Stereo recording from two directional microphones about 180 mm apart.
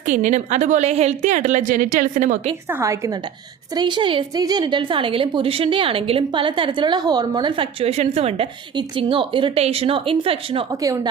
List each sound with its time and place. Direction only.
0.1 s a woman's voice: 45° right (ahead or behind)
2.6 s a woman's voice: 15° right (ahead or behind)
3.8 s a woman's voice: 25° right (ahead or behind)